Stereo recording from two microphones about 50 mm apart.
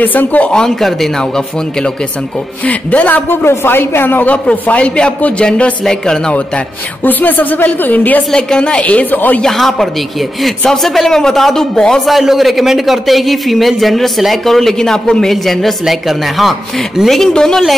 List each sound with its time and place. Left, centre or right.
0.0 s a woman's voice: left
0.5 s speech: centre
0.7 s speech: centre
2.6 s a woman's voice: left
3.3 s speech: left
4.3 s a woman's voice: left
7.0 s a woman's voice: left
8.3 s a woman's voice: centre; by 9.4 s left
9.4 s speech: centre
12.1 s a man's voice: centre
17.3 s speech: centre